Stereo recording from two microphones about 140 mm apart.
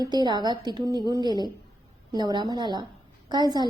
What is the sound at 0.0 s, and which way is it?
A woman's voice, 30° right (ahead or behind).